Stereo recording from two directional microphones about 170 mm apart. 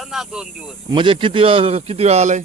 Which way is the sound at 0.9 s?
30° right (ahead or behind).